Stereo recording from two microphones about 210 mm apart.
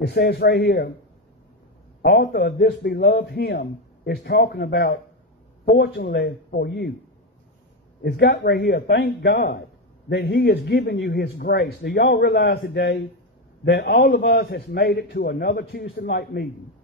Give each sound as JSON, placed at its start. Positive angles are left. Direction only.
{"t": 0.0, "sound": "a man's voice", "side_deg": 50}
{"t": 2.0, "sound": "a man's voice", "side_deg": 50}
{"t": 8.0, "sound": "a man's voice", "side_deg": 50}